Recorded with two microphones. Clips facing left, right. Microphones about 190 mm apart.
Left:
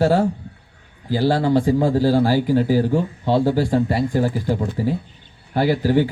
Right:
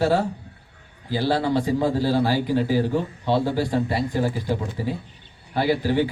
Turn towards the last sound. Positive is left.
turn(degrees=45)  # may be behind; listen again after turning